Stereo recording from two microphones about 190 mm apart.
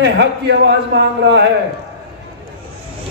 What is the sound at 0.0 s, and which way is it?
A man's voice, 60° right (ahead or behind).